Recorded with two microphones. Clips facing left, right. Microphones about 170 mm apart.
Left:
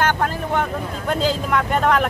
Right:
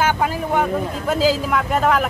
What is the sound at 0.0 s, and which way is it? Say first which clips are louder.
Speech: right 1 dB; 5° right (ahead or behind).